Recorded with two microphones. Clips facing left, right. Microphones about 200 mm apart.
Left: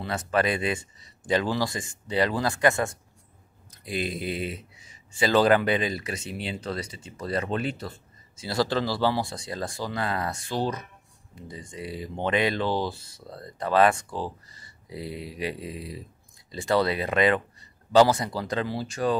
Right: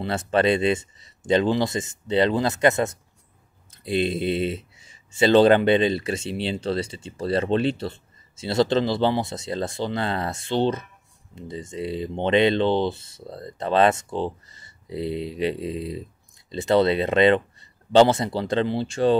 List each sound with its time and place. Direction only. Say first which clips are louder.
0.0 s speech: right 4 dB; 25° right (ahead or behind)